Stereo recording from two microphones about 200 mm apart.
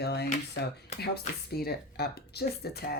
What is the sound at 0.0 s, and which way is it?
Speech, 55° left (ahead or behind).